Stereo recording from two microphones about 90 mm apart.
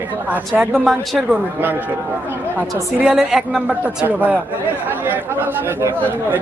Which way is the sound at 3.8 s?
20° right (ahead or behind).